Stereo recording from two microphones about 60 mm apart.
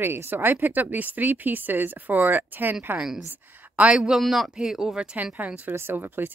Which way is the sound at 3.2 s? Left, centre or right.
Right.